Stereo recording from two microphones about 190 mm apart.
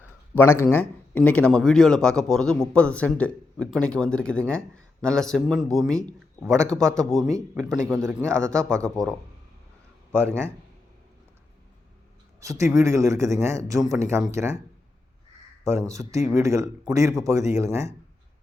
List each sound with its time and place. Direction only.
0.3 s a man's voice: 10° left (ahead or behind)
10.2 s a man's voice: 10° right (ahead or behind)
12.4 s a man's voice: 15° right (ahead or behind)
15.6 s a man's voice: 15° right (ahead or behind)